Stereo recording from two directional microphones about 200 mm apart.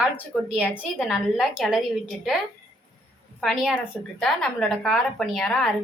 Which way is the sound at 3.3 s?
Centre (ahead or behind).